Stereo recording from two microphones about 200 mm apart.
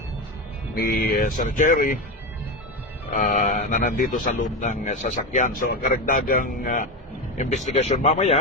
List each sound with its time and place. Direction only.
0.8 s a man's voice: 50° left (ahead or behind)
3.1 s a man's voice: 45° left (ahead or behind)